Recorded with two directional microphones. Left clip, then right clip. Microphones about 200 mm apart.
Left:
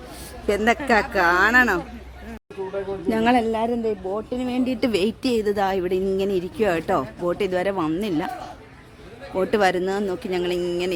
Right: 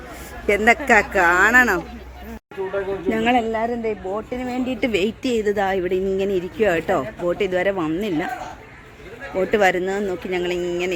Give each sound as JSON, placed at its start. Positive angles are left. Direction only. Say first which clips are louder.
{"t": 0.4, "sound": "speech", "louder": "right 4 dB", "side_deg": 0}
{"t": 3.2, "sound": "a woman's voice", "louder": "even", "side_deg": 15}
{"t": 5.0, "sound": "a woman's voice", "louder": "right 1 dB", "side_deg": 40}
{"t": 5.4, "sound": "speech", "louder": "right 2 dB", "side_deg": 0}
{"t": 9.3, "sound": "speech", "louder": "right 2 dB", "side_deg": 0}